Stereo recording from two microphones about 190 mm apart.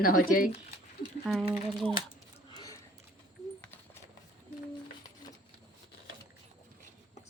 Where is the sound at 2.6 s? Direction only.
20° left (ahead or behind).